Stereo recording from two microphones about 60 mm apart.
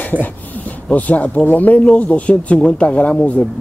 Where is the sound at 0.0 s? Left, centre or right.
Left.